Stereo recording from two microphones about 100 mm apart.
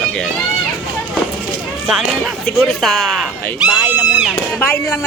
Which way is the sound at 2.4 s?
Centre (ahead or behind).